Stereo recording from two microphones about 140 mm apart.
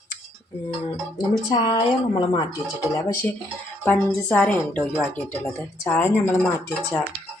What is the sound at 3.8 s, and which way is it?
A woman's voice, 10° left (ahead or behind).